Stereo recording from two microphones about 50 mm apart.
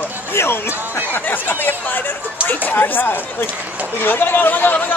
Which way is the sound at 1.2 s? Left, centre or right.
Left.